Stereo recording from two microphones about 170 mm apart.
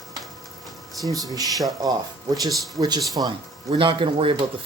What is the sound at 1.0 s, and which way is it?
Speech, 20° right (ahead or behind).